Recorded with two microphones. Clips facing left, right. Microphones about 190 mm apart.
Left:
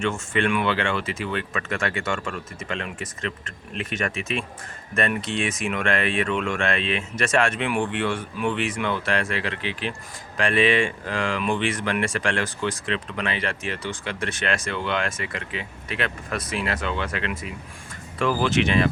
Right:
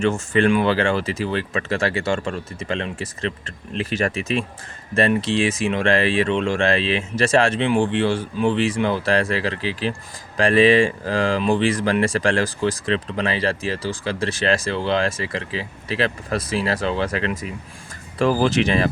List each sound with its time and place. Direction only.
0.0 s speech: 35° right (ahead or behind)